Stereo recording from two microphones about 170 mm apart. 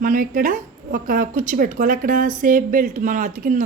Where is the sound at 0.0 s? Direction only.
50° right (ahead or behind).